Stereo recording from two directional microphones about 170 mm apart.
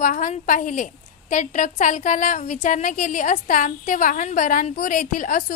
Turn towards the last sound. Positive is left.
turn(degrees=50)  # may be behind; listen again after turning